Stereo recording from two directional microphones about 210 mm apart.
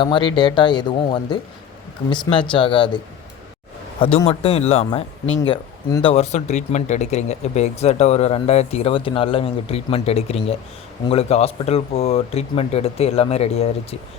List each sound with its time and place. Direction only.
0.0 s speech: 20° left (ahead or behind)
4.3 s speech: 30° left (ahead or behind)